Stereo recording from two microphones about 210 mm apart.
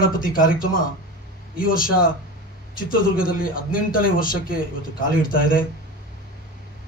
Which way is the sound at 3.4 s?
40° left (ahead or behind).